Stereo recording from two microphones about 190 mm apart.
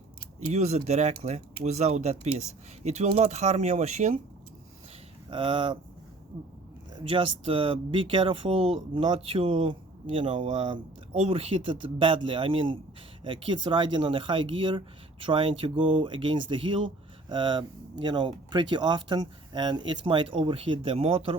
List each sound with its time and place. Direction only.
0.3 s speech: 35° right (ahead or behind)
5.3 s speech: 30° right (ahead or behind)
6.9 s speech: 30° right (ahead or behind)